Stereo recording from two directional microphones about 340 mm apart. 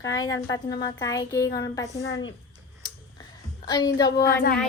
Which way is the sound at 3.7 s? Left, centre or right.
Centre.